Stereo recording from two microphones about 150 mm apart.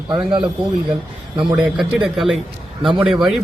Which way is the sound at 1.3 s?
35° right (ahead or behind).